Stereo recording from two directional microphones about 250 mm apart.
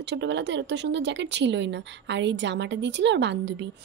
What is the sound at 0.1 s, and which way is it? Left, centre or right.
Speech, right.